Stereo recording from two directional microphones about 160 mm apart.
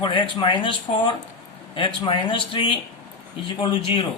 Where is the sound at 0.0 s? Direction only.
30° left (ahead or behind).